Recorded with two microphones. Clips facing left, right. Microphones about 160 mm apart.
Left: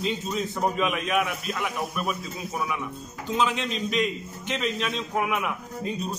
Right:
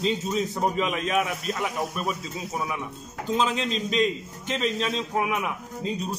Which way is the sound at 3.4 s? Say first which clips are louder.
Left 1 dB; 30° right (ahead or behind).